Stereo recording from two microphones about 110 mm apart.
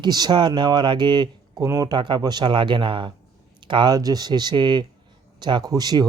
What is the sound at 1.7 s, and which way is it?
Speech, 30° right (ahead or behind).